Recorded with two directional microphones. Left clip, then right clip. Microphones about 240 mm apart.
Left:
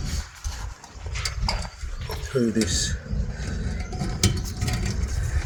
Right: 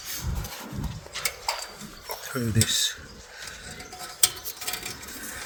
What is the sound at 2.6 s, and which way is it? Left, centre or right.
Speech, centre.